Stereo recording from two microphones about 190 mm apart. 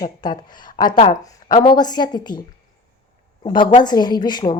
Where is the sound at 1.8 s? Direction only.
20° left (ahead or behind).